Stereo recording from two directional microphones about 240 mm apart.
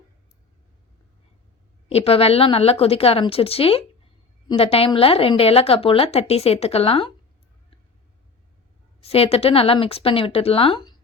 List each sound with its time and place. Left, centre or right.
1.9 s a woman's voice: left
9.0 s a woman's voice: left